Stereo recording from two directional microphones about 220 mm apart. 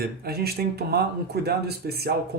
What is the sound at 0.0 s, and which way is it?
Speech, 45° right (ahead or behind).